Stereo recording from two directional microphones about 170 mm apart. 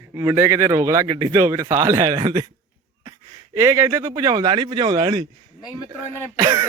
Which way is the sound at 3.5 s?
15° right (ahead or behind).